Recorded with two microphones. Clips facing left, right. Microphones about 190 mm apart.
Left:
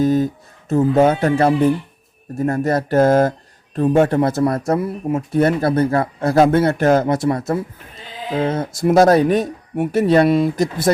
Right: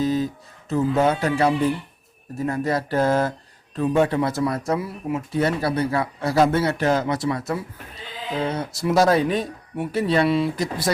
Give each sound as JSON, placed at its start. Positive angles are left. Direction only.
{"t": 0.0, "sound": "speech", "side_deg": 50}